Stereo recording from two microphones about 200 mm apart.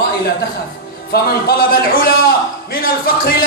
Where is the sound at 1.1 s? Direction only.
50° left (ahead or behind).